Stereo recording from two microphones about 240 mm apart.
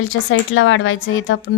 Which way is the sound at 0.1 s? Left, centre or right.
Left.